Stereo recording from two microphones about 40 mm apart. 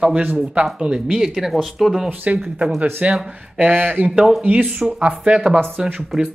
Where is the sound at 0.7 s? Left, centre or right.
Centre.